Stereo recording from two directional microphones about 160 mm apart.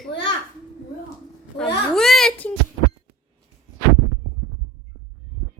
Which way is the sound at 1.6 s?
Centre (ahead or behind).